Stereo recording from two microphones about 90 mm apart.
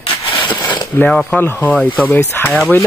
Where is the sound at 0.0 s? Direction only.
65° left (ahead or behind).